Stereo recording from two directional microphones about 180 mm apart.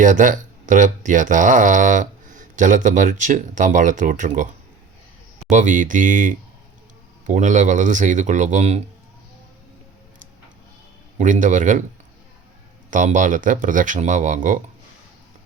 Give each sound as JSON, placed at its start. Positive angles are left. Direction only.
{"t": 0.0, "sound": "speech", "side_deg": -45}
{"t": 5.5, "sound": "speech", "side_deg": -45}
{"t": 11.2, "sound": "speech", "side_deg": -45}
{"t": 12.9, "sound": "speech", "side_deg": -45}